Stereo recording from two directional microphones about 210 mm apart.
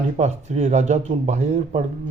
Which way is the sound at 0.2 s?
35° right (ahead or behind).